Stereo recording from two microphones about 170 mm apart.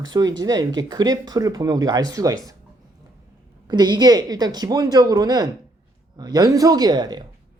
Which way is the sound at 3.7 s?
25° right (ahead or behind).